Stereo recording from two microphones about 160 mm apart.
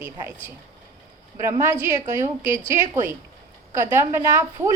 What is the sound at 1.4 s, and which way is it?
A woman's voice, 15° right (ahead or behind).